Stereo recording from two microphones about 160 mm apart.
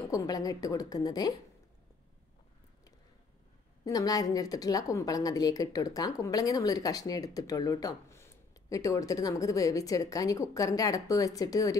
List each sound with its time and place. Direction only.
0.1 s speech: 20° left (ahead or behind)
3.8 s speech: 20° left (ahead or behind)